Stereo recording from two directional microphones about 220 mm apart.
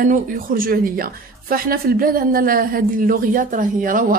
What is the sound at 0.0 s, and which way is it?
A woman's voice, 40° right (ahead or behind).